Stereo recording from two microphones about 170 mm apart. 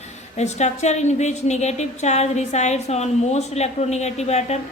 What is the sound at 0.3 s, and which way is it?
A woman's voice, 40° left (ahead or behind).